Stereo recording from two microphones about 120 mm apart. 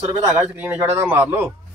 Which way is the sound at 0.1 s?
25° right (ahead or behind).